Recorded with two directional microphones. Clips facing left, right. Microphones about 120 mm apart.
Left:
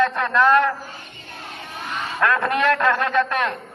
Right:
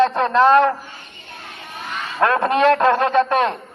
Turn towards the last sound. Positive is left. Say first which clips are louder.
# right 4 dB
turn(degrees=-25)  # may be behind; listen again after turning